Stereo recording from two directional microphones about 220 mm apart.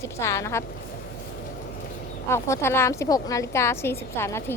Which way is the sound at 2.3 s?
10° left (ahead or behind).